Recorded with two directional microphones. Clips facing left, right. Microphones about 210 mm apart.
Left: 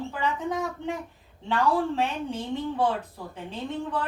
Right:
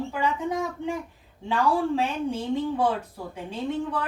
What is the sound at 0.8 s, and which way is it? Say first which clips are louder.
A woman's voice: right 2 dB; 10° right (ahead or behind).